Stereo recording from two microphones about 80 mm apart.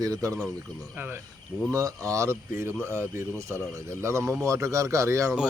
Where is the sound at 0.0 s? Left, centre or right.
Right.